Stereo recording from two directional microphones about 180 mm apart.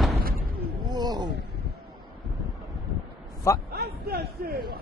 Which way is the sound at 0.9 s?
20° right (ahead or behind).